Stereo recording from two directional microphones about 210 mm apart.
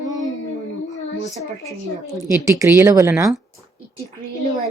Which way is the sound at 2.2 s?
15° right (ahead or behind).